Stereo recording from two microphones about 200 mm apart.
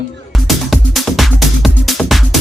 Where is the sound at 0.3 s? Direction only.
Centre (ahead or behind).